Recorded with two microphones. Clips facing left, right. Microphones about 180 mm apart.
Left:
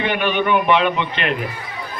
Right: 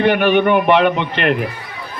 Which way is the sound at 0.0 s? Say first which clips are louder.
Right 7 dB; 55° right (ahead or behind).